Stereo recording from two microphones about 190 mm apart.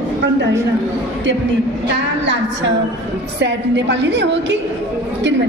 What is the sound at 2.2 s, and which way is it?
A woman's voice, 70° right (ahead or behind).